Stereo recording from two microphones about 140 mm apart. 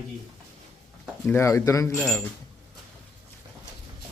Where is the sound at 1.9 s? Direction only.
5° left (ahead or behind).